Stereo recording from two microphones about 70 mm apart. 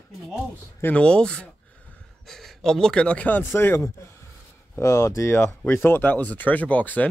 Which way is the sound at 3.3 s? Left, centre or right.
Left.